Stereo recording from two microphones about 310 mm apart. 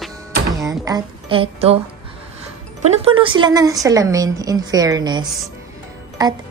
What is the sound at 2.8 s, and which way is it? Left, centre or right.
A woman's voice, centre.